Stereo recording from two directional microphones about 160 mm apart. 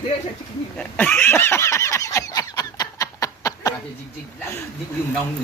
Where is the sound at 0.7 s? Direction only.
10° left (ahead or behind).